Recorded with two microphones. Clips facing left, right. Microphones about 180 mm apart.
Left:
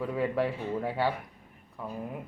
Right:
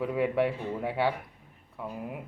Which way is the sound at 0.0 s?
5° right (ahead or behind).